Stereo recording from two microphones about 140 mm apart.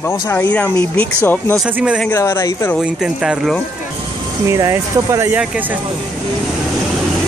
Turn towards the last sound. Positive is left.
turn(degrees=-20)  # may be behind; listen again after turning